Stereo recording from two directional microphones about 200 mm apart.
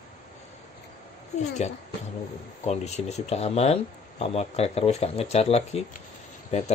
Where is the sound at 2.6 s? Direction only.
35° left (ahead or behind).